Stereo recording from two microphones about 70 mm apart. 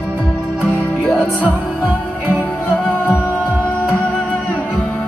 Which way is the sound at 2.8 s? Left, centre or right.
Left.